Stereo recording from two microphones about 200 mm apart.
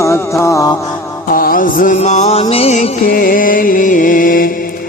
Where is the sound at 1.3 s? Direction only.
45° left (ahead or behind).